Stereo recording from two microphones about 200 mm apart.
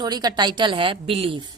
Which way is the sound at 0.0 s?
20° right (ahead or behind).